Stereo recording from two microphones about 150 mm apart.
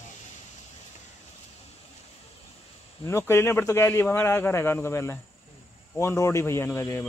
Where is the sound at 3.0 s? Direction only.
20° left (ahead or behind).